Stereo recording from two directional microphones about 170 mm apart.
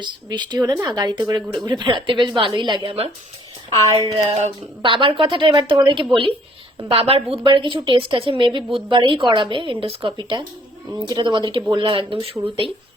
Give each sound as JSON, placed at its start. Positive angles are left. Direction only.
{"t": 0.0, "sound": "a woman's voice", "side_deg": -25}